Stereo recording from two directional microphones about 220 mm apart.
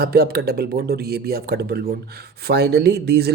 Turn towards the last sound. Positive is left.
turn(degrees=-45)  # may be behind; listen again after turning